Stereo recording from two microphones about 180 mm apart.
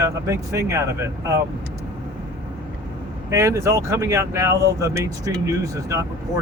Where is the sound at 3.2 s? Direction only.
15° right (ahead or behind).